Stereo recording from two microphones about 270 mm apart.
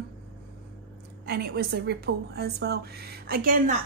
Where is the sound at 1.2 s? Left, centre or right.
Right.